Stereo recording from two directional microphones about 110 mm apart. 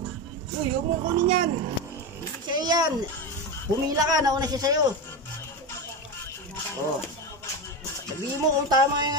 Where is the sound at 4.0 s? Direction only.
35° right (ahead or behind).